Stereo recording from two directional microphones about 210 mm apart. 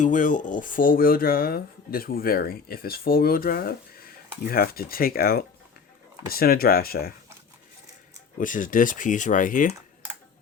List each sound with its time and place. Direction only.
0.0 s speech: 40° left (ahead or behind)
8.4 s speech: 40° left (ahead or behind)